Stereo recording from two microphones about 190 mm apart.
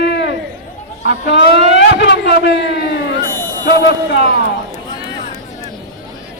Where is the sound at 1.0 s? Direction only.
75° left (ahead or behind).